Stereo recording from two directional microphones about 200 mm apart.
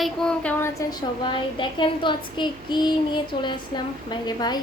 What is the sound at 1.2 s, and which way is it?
Child singing, 25° left (ahead or behind).